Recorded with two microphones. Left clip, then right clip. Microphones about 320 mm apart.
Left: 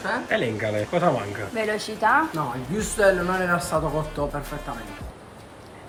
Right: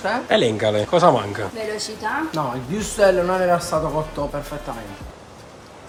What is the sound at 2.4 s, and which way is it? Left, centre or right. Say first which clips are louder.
Speech: right 4 dB; right.